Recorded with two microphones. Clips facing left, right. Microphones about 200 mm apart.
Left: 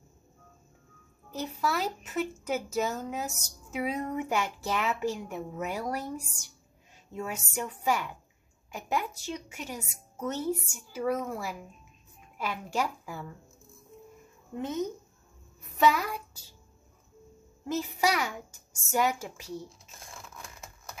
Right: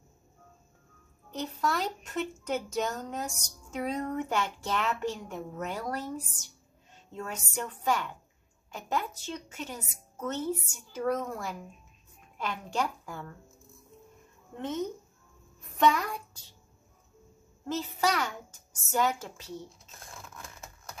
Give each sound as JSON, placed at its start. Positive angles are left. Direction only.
{"t": 1.3, "sound": "a woman's voice", "side_deg": 5}
{"t": 15.8, "sound": "a child's voice", "side_deg": 5}
{"t": 17.6, "sound": "a woman's voice", "side_deg": 10}
{"t": 20.1, "sound": "a sound", "side_deg": 0}